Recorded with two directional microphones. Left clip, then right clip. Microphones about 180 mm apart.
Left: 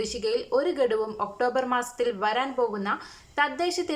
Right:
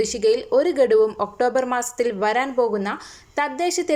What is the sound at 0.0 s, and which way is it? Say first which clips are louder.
A woman's voice: right 8 dB; 15° right (ahead or behind).